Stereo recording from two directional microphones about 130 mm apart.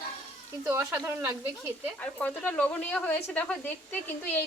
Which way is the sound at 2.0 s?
10° left (ahead or behind).